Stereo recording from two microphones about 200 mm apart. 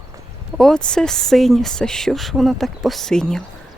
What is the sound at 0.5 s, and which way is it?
Speech, 5° left (ahead or behind).